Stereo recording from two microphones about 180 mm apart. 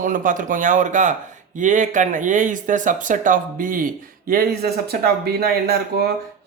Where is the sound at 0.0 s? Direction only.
50° right (ahead or behind).